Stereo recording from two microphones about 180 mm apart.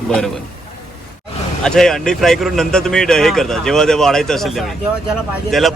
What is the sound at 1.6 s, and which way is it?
Speech, 5° left (ahead or behind).